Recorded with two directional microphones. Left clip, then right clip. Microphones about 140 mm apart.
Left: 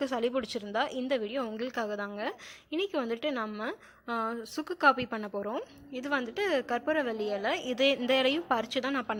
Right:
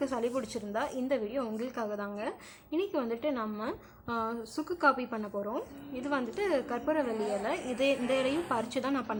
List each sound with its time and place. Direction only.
0.0 s a woman's voice: 25° left (ahead or behind)
5.5 s a woman's voice: 20° left (ahead or behind)